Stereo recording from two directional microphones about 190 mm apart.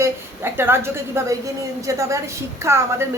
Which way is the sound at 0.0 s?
10° right (ahead or behind).